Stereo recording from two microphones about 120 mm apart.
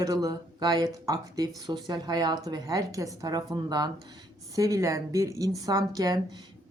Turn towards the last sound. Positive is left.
turn(degrees=-35)  # may be behind; listen again after turning